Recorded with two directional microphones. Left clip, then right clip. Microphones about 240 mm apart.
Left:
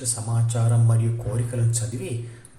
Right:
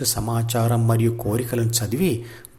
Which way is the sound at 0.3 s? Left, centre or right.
Right.